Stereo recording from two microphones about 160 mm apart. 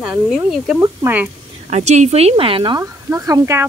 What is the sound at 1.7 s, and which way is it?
Speech, 45° right (ahead or behind).